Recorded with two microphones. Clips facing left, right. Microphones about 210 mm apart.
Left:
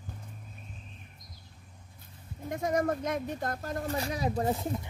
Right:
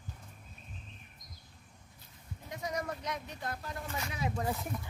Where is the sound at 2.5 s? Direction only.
50° left (ahead or behind).